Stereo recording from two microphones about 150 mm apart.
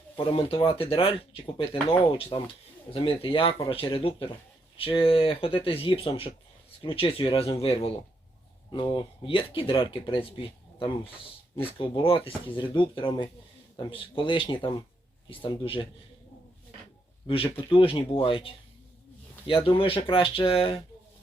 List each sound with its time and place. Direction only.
0.2 s speech: 40° left (ahead or behind)
17.2 s speech: 35° left (ahead or behind)